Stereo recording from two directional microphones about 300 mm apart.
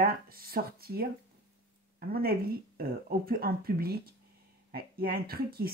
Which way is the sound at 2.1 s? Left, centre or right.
Right.